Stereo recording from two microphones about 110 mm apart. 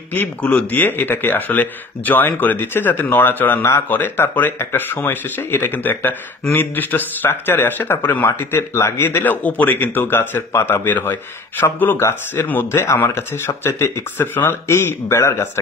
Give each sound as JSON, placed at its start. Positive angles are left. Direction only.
{"t": 0.1, "sound": "a man's voice", "side_deg": 15}